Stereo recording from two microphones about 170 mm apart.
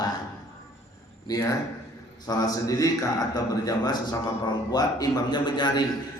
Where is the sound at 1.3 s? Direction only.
20° left (ahead or behind).